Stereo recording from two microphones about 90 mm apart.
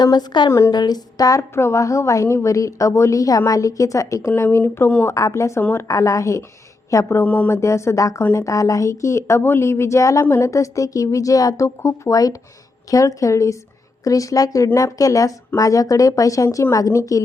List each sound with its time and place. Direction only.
0.0 s a woman's voice: 50° left (ahead or behind); by 7.3 s 30° left (ahead or behind)
7.3 s speech: 20° left (ahead or behind)
7.5 s a woman's voice: 35° left (ahead or behind)